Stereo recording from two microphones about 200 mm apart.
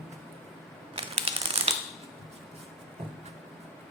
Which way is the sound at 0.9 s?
30° right (ahead or behind).